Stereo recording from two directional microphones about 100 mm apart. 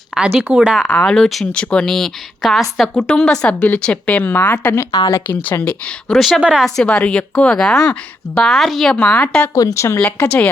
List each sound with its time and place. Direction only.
0.1 s speech: 5° right (ahead or behind)
1.0 s a woman's voice: 5° left (ahead or behind); by 4.9 s 20° left (ahead or behind)
4.9 s speech: 45° left (ahead or behind)
5.1 s speech: 20° left (ahead or behind)
6.1 s speech: centre (ahead or behind)
6.7 s a woman's voice: 10° left (ahead or behind)
9.6 s speech: 30° left (ahead or behind)
10.0 s a woman's voice: 15° left (ahead or behind)